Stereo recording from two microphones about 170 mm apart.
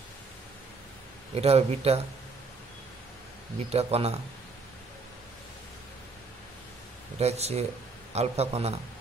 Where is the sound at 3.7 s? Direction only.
35° right (ahead or behind).